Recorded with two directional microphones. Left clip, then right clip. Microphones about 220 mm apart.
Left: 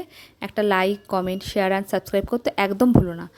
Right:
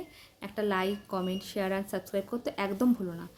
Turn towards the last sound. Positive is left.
turn(degrees=40)  # may be behind; listen again after turning